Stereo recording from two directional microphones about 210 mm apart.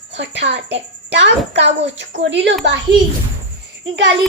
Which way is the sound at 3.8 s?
60° right (ahead or behind).